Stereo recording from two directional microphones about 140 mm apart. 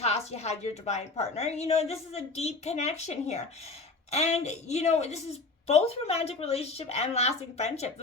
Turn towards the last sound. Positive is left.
turn(degrees=50)  # may be behind; listen again after turning